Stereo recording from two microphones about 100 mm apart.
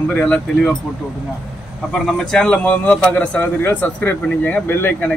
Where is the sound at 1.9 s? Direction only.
5° left (ahead or behind).